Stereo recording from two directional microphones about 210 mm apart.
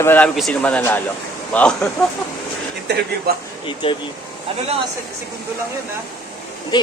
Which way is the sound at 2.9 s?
55° right (ahead or behind).